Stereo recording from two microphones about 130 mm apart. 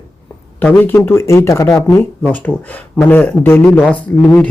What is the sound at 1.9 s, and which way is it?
Speech, 10° left (ahead or behind).